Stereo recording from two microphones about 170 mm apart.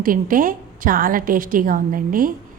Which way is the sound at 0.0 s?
55° right (ahead or behind).